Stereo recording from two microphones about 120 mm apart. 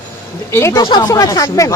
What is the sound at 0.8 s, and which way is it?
Speech, 35° left (ahead or behind).